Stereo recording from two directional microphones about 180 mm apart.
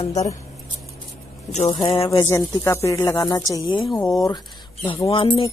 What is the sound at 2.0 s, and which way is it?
Speech, 20° left (ahead or behind).